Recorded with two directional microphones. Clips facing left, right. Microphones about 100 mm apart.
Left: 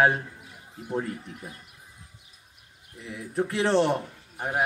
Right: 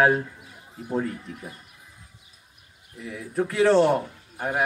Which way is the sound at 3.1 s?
25° left (ahead or behind).